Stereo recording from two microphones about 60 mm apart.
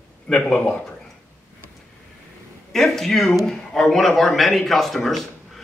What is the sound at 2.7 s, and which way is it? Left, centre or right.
A man's voice, centre.